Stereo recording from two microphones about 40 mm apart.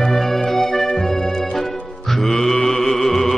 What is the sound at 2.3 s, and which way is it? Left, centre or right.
Mantra, centre.